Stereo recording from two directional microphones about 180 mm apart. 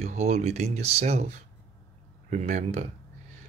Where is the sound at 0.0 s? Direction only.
40° right (ahead or behind).